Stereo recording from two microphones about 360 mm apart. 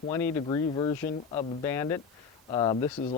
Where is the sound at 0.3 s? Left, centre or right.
Centre.